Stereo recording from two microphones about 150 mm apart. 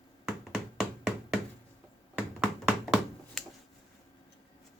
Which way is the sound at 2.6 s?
5° right (ahead or behind).